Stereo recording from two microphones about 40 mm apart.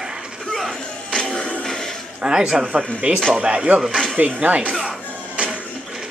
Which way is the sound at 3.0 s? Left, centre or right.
Right.